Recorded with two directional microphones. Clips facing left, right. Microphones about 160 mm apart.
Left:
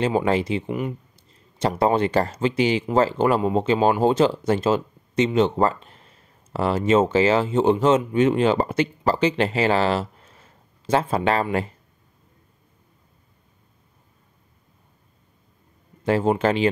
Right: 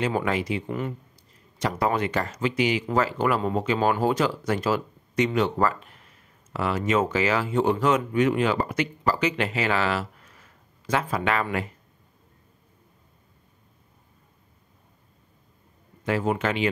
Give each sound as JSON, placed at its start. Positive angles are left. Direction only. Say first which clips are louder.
{"t": 0.0, "sound": "speech", "louder": "left 5 dB", "side_deg": 30}
{"t": 16.0, "sound": "speech", "louder": "left 5 dB", "side_deg": 30}